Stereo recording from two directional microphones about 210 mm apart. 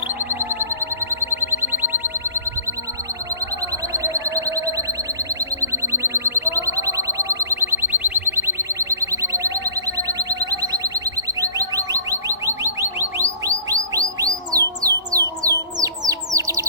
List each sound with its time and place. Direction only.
0.3 s music: 10° right (ahead or behind)
3.9 s a sound: 15° right (ahead or behind)
5.4 s chirp tone: 15° right (ahead or behind)
12.3 s car alarm: 15° right (ahead or behind)
13.7 s bird: 15° right (ahead or behind)
14.5 s a sound: 15° right (ahead or behind)